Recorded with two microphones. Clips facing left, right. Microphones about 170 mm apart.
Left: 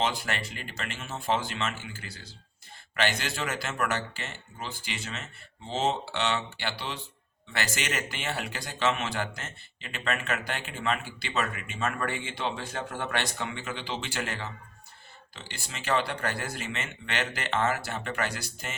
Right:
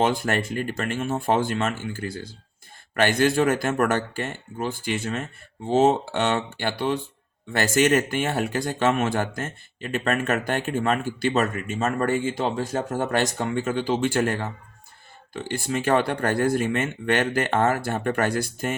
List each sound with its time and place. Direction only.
0.0 s speech: 50° right (ahead or behind)